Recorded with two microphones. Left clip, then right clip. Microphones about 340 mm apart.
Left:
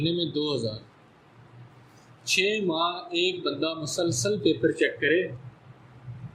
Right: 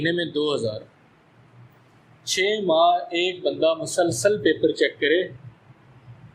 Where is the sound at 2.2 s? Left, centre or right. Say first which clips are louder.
Right 3 dB; centre.